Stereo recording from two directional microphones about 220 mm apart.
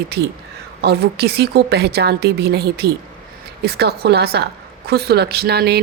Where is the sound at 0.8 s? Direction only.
45° right (ahead or behind).